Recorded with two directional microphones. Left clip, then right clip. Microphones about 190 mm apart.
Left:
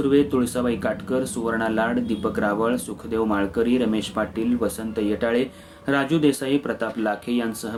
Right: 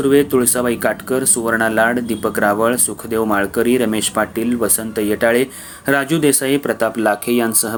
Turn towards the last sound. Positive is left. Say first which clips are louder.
# right 9 dB
turn(degrees=-40)  # may be behind; listen again after turning